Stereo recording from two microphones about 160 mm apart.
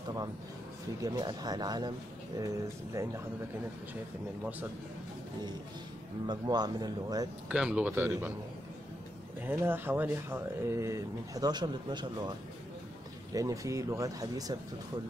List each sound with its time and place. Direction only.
1.0 s speech: 25° right (ahead or behind)
6.2 s speech: 25° right (ahead or behind)
7.4 s speech: 5° right (ahead or behind)
9.4 s speech: 15° right (ahead or behind)